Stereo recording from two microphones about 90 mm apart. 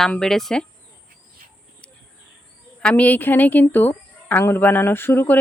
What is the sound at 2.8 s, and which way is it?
A woman's voice, 15° left (ahead or behind).